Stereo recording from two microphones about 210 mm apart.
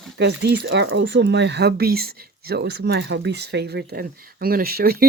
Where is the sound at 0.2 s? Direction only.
55° right (ahead or behind).